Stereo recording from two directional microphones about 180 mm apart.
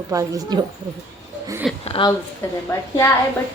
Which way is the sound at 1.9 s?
30° left (ahead or behind).